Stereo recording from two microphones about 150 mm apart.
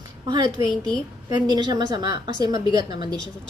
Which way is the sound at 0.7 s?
5° left (ahead or behind).